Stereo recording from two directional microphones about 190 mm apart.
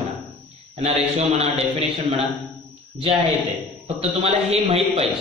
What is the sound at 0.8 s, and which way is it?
A man's voice, 35° right (ahead or behind).